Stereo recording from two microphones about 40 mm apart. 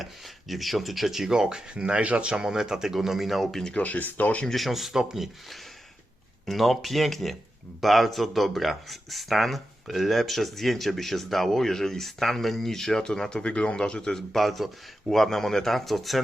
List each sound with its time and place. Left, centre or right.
0.0 s speech: centre; by 2.3 s right
2.3 s speech: centre
3.8 s speech: left
4.5 s speech: centre
14.3 s speech: centre